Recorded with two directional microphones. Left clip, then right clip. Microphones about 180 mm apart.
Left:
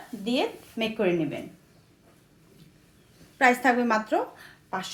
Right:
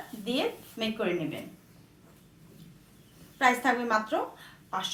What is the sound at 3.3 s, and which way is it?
Speech, 50° left (ahead or behind).